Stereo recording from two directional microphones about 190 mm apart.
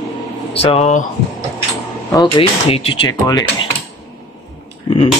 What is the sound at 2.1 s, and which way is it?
Speech, 25° left (ahead or behind).